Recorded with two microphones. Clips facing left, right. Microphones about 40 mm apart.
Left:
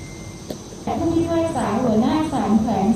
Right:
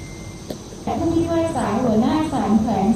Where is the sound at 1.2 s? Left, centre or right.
Centre.